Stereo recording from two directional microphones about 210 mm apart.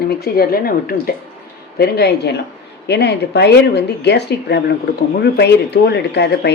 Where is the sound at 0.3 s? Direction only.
45° left (ahead or behind).